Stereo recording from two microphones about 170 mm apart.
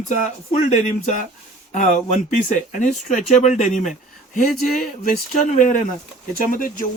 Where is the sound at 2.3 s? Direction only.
50° left (ahead or behind).